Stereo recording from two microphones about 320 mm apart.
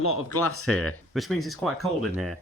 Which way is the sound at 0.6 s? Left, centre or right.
Centre.